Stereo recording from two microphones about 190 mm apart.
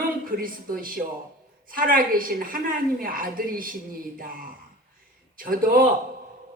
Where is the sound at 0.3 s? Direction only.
50° right (ahead or behind).